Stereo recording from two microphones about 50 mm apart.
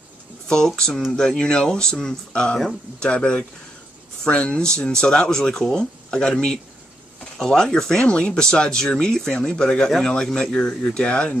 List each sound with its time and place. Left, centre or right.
0.5 s speech: centre